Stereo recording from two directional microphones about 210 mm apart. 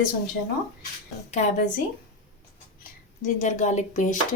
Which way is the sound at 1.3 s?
35° left (ahead or behind).